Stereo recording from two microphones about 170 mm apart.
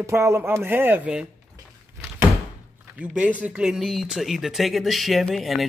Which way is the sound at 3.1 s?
5° right (ahead or behind).